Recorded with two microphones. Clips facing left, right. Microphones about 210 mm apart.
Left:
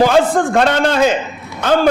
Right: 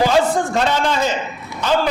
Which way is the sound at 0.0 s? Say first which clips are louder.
Left 4 dB; 55° left (ahead or behind).